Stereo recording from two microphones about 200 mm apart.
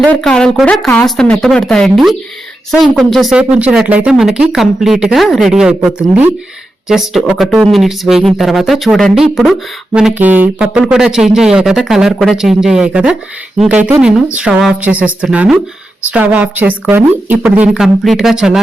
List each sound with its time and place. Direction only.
0.0 s a woman's voice: 5° left (ahead or behind)